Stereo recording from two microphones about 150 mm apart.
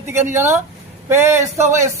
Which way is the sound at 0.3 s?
15° right (ahead or behind).